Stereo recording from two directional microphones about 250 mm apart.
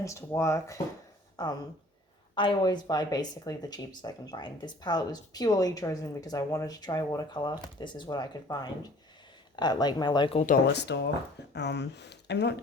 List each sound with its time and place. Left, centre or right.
0.0 s a woman's voice: centre
10.4 s speech: left